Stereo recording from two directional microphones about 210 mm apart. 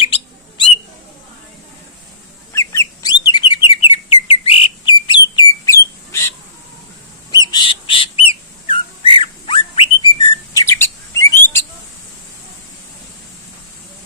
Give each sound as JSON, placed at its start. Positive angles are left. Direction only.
{"t": 0.0, "sound": "bird", "side_deg": 25}
{"t": 2.5, "sound": "bird", "side_deg": 15}
{"t": 3.9, "sound": "whistle", "side_deg": 25}
{"t": 7.5, "sound": "bird", "side_deg": 25}